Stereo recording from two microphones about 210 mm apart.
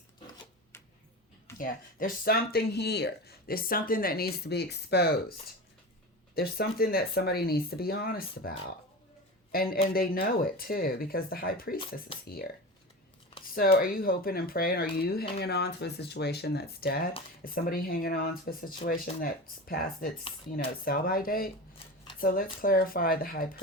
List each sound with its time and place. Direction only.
1.5 s speech: 40° left (ahead or behind)
6.3 s speech: 45° left (ahead or behind)
13.5 s speech: 45° left (ahead or behind)